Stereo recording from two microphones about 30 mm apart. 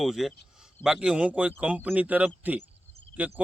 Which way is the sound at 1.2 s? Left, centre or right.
Right.